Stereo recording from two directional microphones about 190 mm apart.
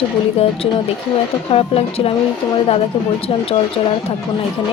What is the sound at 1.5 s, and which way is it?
Speech, 30° left (ahead or behind).